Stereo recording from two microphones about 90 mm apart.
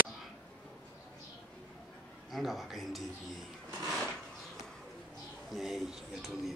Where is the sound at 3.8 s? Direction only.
5° left (ahead or behind).